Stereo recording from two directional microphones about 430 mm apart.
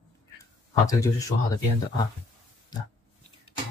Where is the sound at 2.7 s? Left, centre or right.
Centre.